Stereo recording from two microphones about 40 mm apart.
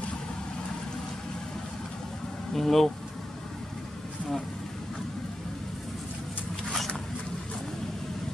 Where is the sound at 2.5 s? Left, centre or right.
Centre.